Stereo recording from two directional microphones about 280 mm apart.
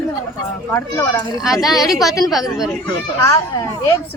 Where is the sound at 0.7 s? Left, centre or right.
Centre.